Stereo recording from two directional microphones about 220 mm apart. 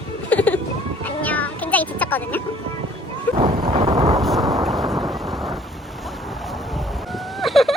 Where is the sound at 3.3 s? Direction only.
10° left (ahead or behind).